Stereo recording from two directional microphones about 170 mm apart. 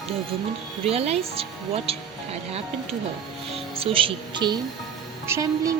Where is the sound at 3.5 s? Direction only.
35° right (ahead or behind); by 5.8 s 20° right (ahead or behind).